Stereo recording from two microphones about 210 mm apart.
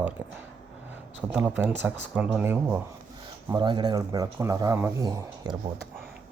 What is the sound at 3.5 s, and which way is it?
Speech, 20° right (ahead or behind).